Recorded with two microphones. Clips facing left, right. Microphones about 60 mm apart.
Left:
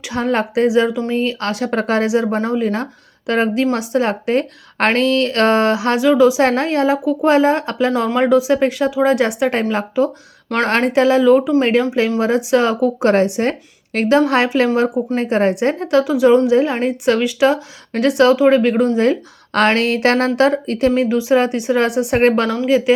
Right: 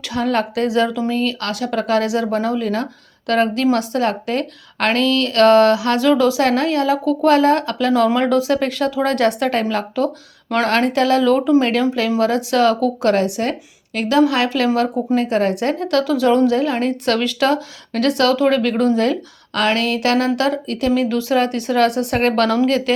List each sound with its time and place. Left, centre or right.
0.1 s a woman's voice: left
6.0 s a woman's voice: centre
6.4 s a woman's voice: left
10.5 s a woman's voice: left; by 11.5 s centre
11.6 s a woman's voice: left
14.8 s a woman's voice: centre
15.1 s a woman's voice: left
19.5 s a woman's voice: left; by 22.9 s centre